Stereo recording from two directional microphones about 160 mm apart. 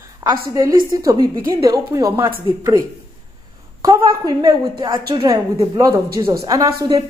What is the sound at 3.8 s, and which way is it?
A woman's voice, 25° right (ahead or behind).